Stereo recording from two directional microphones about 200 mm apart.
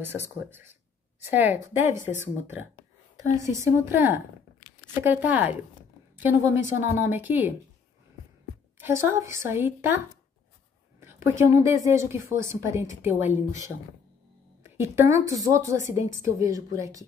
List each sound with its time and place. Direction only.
0.0 s speech: 10° right (ahead or behind)
8.7 s speech: 10° right (ahead or behind)
11.0 s speech: 10° right (ahead or behind)